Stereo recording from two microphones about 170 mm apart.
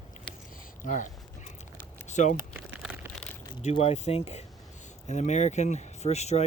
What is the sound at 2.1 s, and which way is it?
Speech, 45° left (ahead or behind).